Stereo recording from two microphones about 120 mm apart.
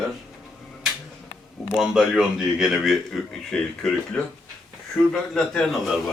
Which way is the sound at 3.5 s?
10° left (ahead or behind).